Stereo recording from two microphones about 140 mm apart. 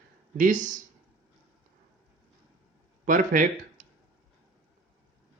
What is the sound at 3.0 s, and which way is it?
Speech, 75° right (ahead or behind).